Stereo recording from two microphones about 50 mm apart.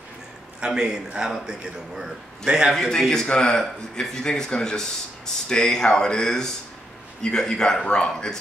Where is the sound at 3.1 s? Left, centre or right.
Centre.